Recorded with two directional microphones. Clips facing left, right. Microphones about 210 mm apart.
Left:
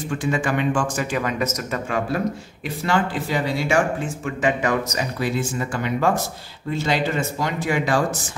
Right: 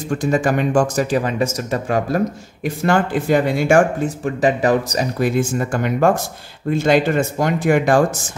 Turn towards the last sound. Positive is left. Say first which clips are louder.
# right 7 dB
turn(degrees=-50)  # may be behind; listen again after turning